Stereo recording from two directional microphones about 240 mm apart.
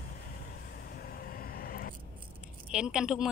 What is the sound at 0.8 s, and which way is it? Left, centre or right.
Vehicle, left.